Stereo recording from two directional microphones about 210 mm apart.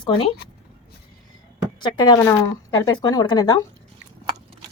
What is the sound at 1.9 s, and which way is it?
Speech, 20° left (ahead or behind).